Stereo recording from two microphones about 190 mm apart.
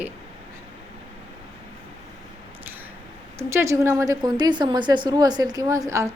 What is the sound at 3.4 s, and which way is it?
A woman's voice, 15° right (ahead or behind).